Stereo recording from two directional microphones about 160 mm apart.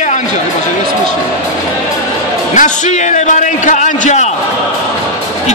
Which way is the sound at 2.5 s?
50° left (ahead or behind).